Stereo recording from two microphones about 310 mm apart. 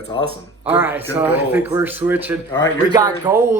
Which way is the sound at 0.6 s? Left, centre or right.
Centre.